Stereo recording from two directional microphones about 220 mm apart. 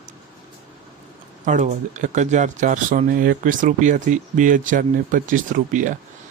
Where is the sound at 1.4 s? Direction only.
35° right (ahead or behind).